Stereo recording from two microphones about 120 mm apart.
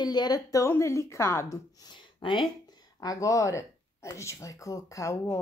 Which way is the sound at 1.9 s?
40° left (ahead or behind).